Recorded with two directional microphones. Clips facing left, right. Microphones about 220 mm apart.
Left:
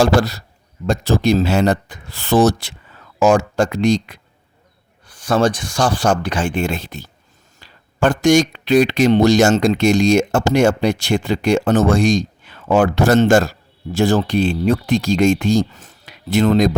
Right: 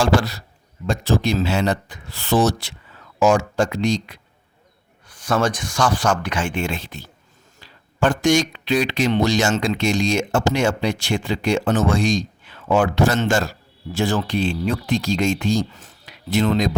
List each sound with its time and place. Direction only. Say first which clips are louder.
0.0 s speech: left 4 dB; 40° left (ahead or behind)
5.0 s speech: left 4 dB; 30° left (ahead or behind)